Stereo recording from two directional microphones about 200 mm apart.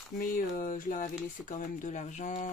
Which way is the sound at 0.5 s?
40° left (ahead or behind).